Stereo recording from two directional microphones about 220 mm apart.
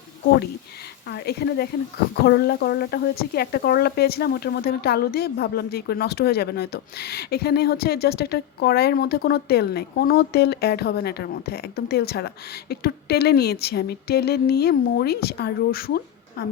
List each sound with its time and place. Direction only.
1.1 s speech: 45° left (ahead or behind)